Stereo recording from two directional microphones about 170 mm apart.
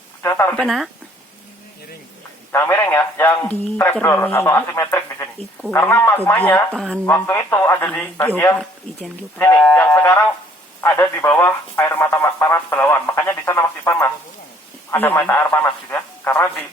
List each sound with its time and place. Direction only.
0.2 s speech: 15° left (ahead or behind)
0.6 s speech: centre (ahead or behind)
2.5 s speech: 15° left (ahead or behind)
7.1 s speech: 15° left (ahead or behind)